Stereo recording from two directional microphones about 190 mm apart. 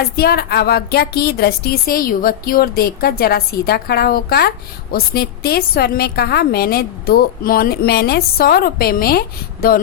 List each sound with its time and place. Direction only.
0.0 s a woman's voice: 55° left (ahead or behind)